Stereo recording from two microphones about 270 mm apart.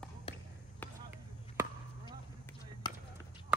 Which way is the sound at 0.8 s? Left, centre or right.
Centre.